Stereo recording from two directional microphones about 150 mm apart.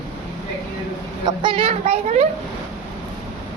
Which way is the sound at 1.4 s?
35° right (ahead or behind).